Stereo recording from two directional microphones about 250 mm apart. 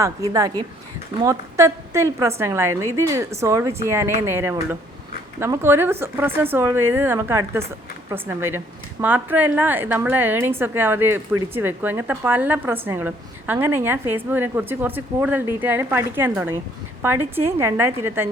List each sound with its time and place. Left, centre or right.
0.0 s a woman's voice: centre